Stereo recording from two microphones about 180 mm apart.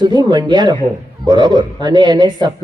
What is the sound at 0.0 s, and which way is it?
A man's voice, 25° right (ahead or behind).